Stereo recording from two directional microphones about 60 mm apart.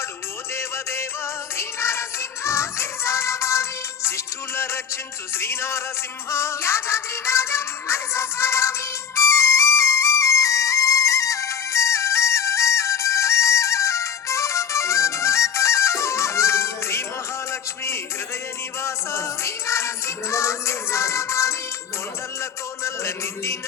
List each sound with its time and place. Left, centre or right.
0.5 s music: left
17.5 s a sound: left
18.8 s music: left
22.8 s music: left